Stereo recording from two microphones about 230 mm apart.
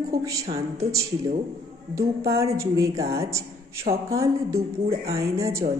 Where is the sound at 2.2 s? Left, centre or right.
Centre.